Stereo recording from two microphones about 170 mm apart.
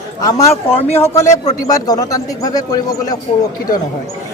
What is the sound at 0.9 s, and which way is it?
Speech, 15° left (ahead or behind).